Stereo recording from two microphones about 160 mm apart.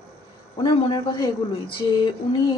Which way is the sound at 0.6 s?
30° left (ahead or behind).